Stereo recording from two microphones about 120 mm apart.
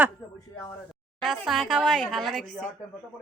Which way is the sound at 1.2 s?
Centre (ahead or behind).